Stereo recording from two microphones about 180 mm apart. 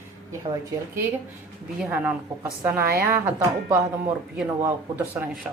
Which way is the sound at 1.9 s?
10° right (ahead or behind).